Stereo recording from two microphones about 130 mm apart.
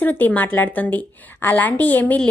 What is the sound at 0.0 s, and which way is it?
A woman's voice, 15° left (ahead or behind).